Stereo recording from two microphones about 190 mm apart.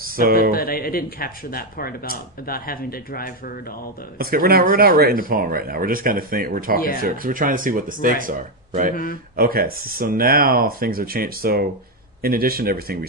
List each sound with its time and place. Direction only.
0.0 s speech: 50° right (ahead or behind)
0.5 s speech: 50° left (ahead or behind)
4.2 s speech: 50° right (ahead or behind)
6.7 s speech: 50° left (ahead or behind)
7.0 s speech: 45° right (ahead or behind)